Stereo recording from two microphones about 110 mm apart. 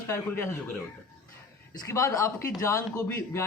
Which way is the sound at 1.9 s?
30° left (ahead or behind).